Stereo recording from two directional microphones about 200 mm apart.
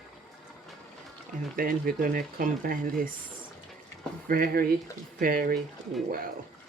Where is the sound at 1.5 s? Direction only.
45° right (ahead or behind).